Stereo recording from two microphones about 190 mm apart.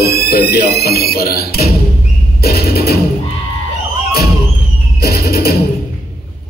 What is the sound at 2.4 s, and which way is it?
Music, 55° left (ahead or behind).